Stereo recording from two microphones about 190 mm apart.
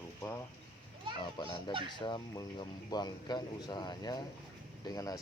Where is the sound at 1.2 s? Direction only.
25° left (ahead or behind).